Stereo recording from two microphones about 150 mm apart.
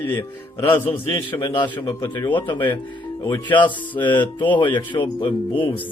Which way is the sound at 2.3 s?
30° left (ahead or behind).